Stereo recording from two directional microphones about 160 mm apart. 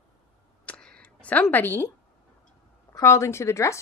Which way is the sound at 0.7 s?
5° left (ahead or behind).